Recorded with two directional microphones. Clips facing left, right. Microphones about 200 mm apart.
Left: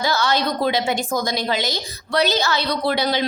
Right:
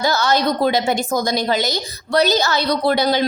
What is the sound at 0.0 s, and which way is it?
A woman's voice, 45° right (ahead or behind).